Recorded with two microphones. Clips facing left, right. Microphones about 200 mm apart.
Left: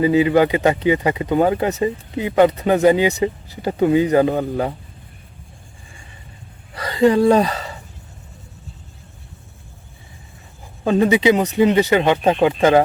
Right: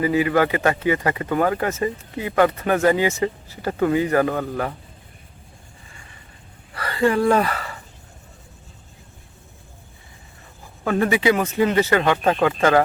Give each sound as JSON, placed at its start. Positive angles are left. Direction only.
{"t": 0.0, "sound": "speech", "side_deg": 20}
{"t": 6.7, "sound": "speech", "side_deg": 20}
{"t": 10.8, "sound": "speech", "side_deg": 20}